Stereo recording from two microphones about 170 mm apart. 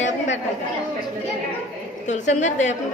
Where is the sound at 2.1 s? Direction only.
45° left (ahead or behind).